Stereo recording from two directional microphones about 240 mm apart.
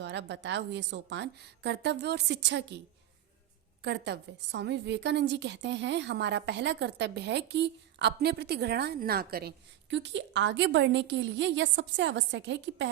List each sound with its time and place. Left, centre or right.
0.0 s a woman's voice: right
3.8 s a woman's voice: right